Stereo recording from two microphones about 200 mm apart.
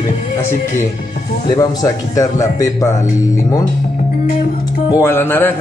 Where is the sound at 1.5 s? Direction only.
15° left (ahead or behind).